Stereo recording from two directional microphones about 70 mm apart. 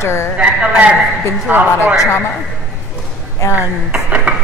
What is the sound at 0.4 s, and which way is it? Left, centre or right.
A woman's voice, centre.